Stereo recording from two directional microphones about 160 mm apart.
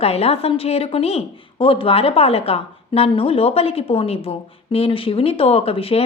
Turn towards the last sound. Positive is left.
turn(degrees=35)  # may be behind; listen again after turning